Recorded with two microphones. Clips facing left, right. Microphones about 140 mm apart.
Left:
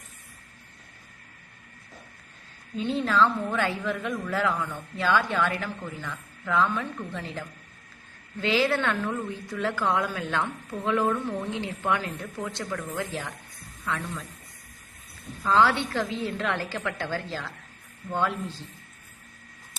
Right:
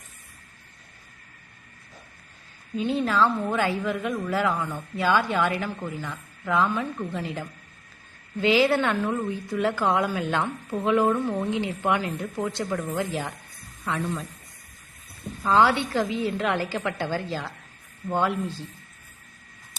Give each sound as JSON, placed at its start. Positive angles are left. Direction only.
{"t": 2.7, "sound": "a woman's voice", "side_deg": -10}
{"t": 15.4, "sound": "a woman's voice", "side_deg": -20}